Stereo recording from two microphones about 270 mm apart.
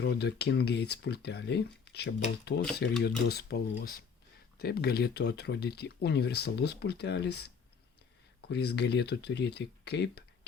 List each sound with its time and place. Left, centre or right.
0.0 s speech: left